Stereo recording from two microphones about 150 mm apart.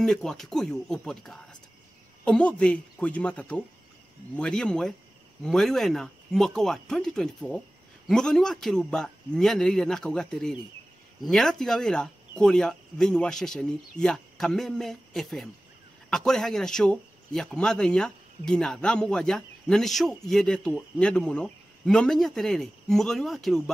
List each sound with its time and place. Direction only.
0.0 s speech: 5° left (ahead or behind)